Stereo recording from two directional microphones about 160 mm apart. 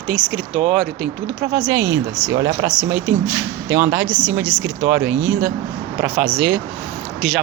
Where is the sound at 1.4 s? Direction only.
15° right (ahead or behind).